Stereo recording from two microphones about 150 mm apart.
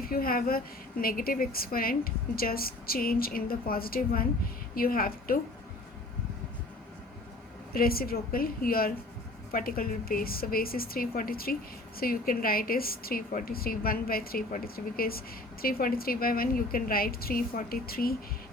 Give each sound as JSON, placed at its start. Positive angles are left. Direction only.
{"t": 0.0, "sound": "a woman's voice", "side_deg": 75}
{"t": 7.7, "sound": "a woman's voice", "side_deg": 80}